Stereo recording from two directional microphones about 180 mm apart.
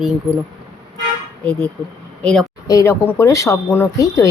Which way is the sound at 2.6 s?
15° left (ahead or behind).